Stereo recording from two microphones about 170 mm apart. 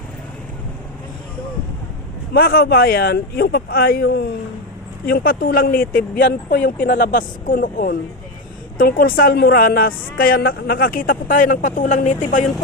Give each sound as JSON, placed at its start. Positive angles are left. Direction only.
{"t": 2.3, "sound": "a woman's voice", "side_deg": 60}